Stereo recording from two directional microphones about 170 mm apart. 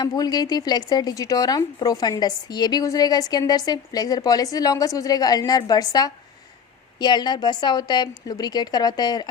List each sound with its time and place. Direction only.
0.0 s speech: 25° left (ahead or behind)